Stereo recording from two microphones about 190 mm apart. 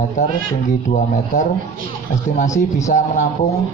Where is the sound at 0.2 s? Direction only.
40° left (ahead or behind).